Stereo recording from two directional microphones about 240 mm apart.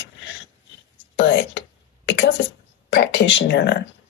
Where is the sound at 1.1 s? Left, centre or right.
Left.